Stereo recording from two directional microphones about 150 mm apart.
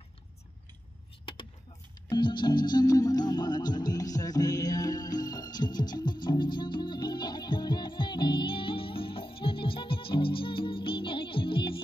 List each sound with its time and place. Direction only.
1.2 s vehicle: 35° left (ahead or behind)
2.0 s music: 30° left (ahead or behind)